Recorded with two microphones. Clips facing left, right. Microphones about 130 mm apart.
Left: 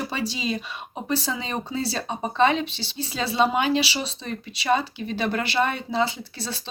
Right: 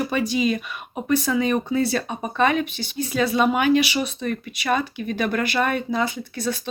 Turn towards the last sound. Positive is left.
turn(degrees=30)  # may be behind; listen again after turning